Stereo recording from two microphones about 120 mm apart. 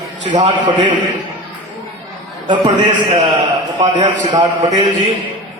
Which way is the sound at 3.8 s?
65° right (ahead or behind).